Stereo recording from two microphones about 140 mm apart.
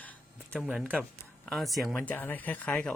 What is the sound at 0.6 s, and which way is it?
Speech, 10° right (ahead or behind).